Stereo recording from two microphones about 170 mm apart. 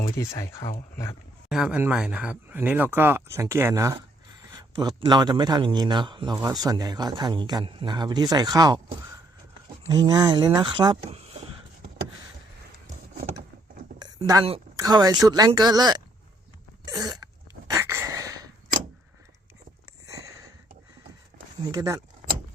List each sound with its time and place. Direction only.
0.3 s speech: 20° left (ahead or behind)
1.5 s speech: 5° right (ahead or behind); by 11.4 s 35° right (ahead or behind)
14.0 s a sound: 20° right (ahead or behind)
14.8 s speech: 25° right (ahead or behind)
16.8 s sneeze: 25° right (ahead or behind)
20.1 s sniff: 20° right (ahead or behind)
21.6 s speech: 20° right (ahead or behind)